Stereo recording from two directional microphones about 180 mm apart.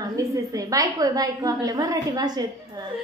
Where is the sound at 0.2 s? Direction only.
20° right (ahead or behind).